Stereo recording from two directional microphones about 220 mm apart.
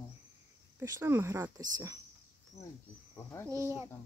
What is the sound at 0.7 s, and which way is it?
Speech, 15° right (ahead or behind).